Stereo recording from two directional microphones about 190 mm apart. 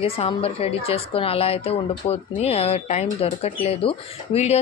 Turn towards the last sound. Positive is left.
turn(degrees=30)  # may be behind; listen again after turning